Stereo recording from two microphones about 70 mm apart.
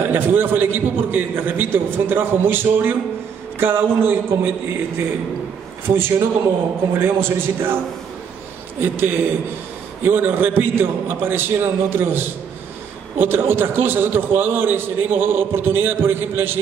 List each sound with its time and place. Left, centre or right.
0.1 s a man's voice: right
5.9 s a man's voice: right
8.8 s a man's voice: right